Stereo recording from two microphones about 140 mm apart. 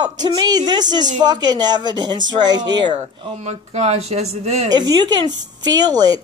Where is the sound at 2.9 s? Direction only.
55° right (ahead or behind).